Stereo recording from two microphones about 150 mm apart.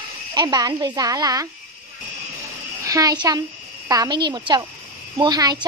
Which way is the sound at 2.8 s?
25° right (ahead or behind).